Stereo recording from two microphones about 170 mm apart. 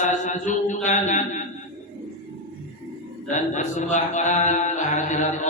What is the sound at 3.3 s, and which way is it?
Mantra, 45° left (ahead or behind).